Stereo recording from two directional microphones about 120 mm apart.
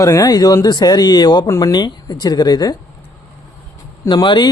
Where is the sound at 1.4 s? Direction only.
25° left (ahead or behind).